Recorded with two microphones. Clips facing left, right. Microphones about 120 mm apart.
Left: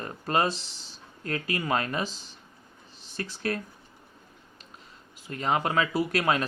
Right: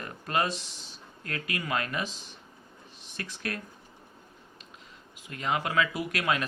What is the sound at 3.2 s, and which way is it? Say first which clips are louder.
Speech: left 5 dB; 30° left (ahead or behind).